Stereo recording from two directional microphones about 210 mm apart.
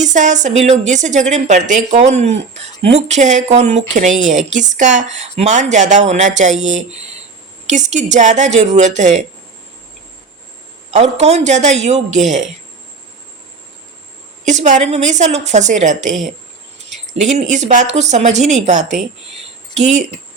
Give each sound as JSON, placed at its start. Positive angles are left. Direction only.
{"t": 0.0, "sound": "a woman's voice", "side_deg": -35}
{"t": 10.9, "sound": "a woman's voice", "side_deg": -30}
{"t": 14.4, "sound": "a woman's voice", "side_deg": -35}
{"t": 17.5, "sound": "a woman's voice", "side_deg": -35}